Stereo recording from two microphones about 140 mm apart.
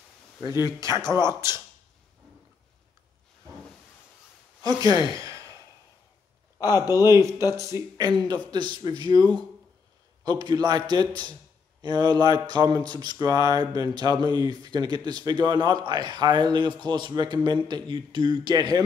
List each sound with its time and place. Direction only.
0.4 s speech: 20° right (ahead or behind)
4.6 s speech: 25° right (ahead or behind)
5.1 s sigh: 25° right (ahead or behind)
7.1 s a man's voice: 20° right (ahead or behind)